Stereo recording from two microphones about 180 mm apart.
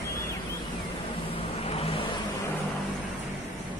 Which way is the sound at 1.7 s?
30° left (ahead or behind).